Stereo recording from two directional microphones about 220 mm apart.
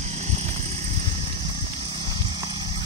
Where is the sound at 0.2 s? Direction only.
30° right (ahead or behind).